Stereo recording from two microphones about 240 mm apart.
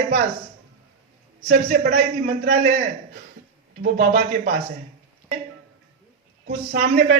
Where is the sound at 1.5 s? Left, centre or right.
Right.